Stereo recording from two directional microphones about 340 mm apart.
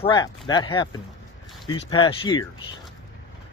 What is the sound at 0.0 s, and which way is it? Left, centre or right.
Speech, centre.